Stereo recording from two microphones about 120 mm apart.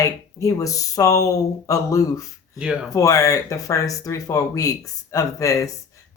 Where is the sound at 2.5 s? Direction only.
5° right (ahead or behind).